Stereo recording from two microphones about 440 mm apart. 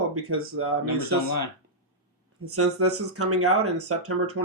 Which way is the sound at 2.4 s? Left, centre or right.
Right.